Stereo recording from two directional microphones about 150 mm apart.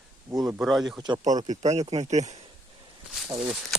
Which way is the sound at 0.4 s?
Centre (ahead or behind).